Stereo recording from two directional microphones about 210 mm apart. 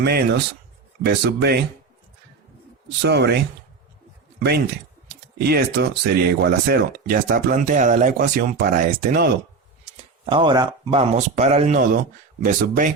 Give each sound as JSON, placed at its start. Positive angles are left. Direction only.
{"t": 0.0, "sound": "speech", "side_deg": -50}
{"t": 3.0, "sound": "speech", "side_deg": -55}
{"t": 4.4, "sound": "speech", "side_deg": -50}
{"t": 10.2, "sound": "speech", "side_deg": -25}
{"t": 11.1, "sound": "speech", "side_deg": -35}